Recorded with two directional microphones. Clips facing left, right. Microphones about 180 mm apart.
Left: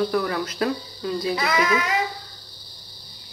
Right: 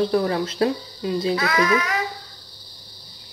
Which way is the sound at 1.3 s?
20° left (ahead or behind).